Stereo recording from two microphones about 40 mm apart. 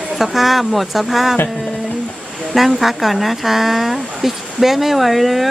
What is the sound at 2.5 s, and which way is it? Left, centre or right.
Speech, centre.